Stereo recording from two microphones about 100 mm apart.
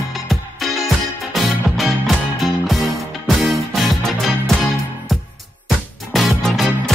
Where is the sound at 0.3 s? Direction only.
Centre (ahead or behind).